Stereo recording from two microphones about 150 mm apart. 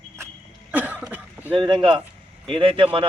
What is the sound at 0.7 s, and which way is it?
Cough, 10° right (ahead or behind).